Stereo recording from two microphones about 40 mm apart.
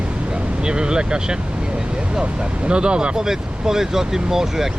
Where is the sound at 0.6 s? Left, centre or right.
Right.